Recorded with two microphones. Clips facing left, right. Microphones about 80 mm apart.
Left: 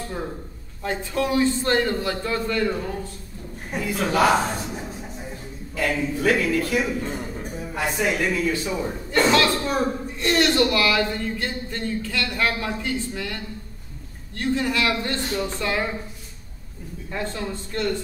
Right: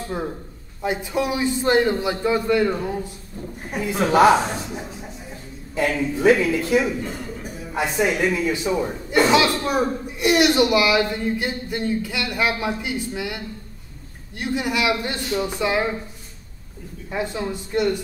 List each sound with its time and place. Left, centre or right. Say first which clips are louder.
0.8 s a man's voice: right 2 dB; centre
4.3 s speech: right 3 dB; centre
5.8 s a man's voice: right 3 dB; centre
17.1 s speech: right 3 dB; centre